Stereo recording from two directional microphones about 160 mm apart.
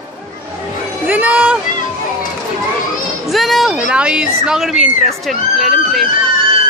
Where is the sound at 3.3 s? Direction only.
Centre (ahead or behind).